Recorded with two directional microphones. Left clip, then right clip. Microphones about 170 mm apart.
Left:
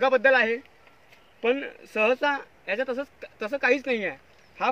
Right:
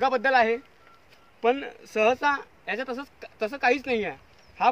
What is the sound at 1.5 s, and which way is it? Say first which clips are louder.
Speech: left 1 dB; 15° right (ahead or behind).